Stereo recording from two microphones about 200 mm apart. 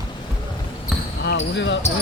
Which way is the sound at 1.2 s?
60° left (ahead or behind).